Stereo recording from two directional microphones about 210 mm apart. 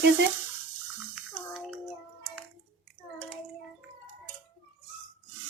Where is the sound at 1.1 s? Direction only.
Centre (ahead or behind).